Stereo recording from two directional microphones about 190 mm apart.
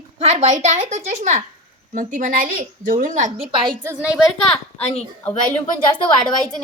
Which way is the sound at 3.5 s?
25° right (ahead or behind).